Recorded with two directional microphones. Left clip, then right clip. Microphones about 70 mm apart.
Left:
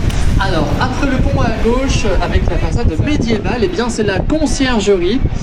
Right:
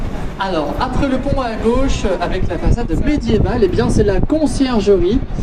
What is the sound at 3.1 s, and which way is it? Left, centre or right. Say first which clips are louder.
Speech: even; left.